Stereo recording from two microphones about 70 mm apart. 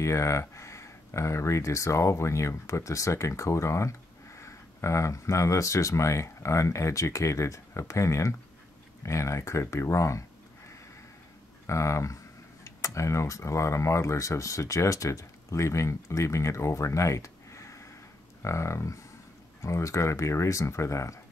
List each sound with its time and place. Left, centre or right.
0.0 s speech: left
11.6 s speech: left